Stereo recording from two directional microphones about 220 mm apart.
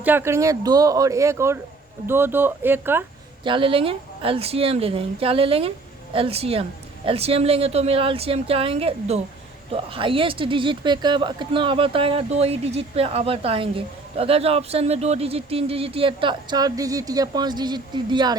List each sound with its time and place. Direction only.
0.0 s speech: 10° right (ahead or behind)
3.4 s speech: 25° right (ahead or behind)